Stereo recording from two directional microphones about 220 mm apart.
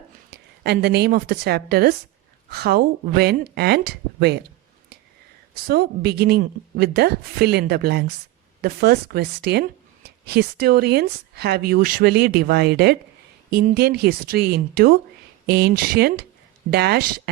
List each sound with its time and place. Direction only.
0.3 s a woman's voice: 45° right (ahead or behind)
5.6 s speech: 45° right (ahead or behind)